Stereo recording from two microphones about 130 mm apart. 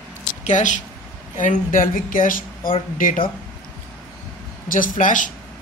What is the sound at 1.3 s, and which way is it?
Speech, 90° left.